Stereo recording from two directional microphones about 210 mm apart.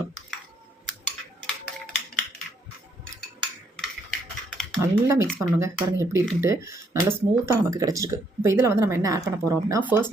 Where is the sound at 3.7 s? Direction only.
5° left (ahead or behind).